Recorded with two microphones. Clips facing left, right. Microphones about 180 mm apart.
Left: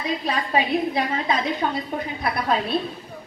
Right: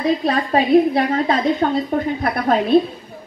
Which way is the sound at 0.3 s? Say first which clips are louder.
Right 7 dB; 45° right (ahead or behind).